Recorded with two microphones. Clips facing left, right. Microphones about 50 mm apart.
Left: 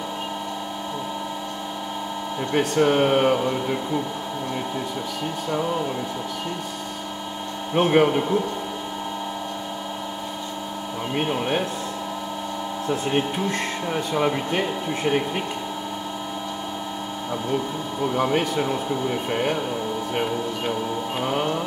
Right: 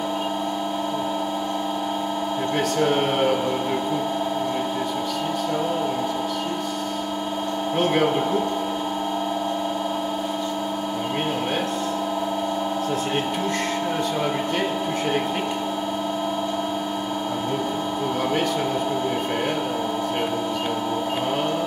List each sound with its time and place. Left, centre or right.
2.5 s speech: centre
7.7 s speech: centre
14.1 s speech: centre
18.1 s speech: centre